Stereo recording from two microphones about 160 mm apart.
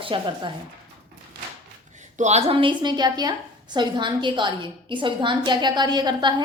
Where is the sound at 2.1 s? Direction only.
45° right (ahead or behind).